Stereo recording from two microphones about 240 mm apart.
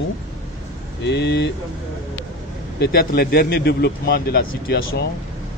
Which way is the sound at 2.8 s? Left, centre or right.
Left.